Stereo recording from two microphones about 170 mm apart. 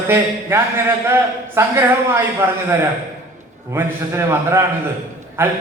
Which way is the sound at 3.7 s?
15° right (ahead or behind).